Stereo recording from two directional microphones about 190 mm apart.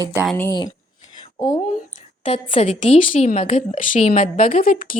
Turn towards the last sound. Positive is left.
turn(degrees=50)  # may be behind; listen again after turning